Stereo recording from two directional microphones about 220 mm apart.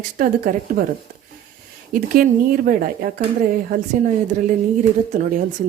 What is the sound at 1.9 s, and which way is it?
A woman's voice, 40° right (ahead or behind).